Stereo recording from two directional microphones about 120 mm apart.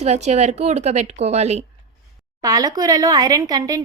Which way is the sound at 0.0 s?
70° right (ahead or behind).